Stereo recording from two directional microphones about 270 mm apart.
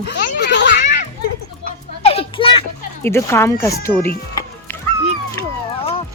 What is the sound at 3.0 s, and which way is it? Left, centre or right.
Speech, centre.